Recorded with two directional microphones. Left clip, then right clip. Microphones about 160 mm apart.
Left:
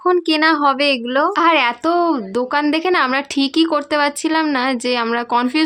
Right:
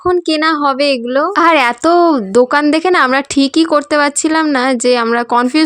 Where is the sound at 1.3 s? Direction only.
40° right (ahead or behind).